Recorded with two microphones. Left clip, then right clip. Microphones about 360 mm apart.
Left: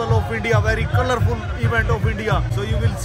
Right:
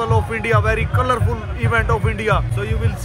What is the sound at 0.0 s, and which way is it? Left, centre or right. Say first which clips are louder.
A man's voice: right 2 dB; centre.